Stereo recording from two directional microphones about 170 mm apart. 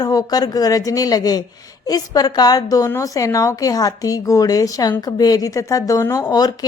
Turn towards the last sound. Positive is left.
turn(degrees=25)  # may be behind; listen again after turning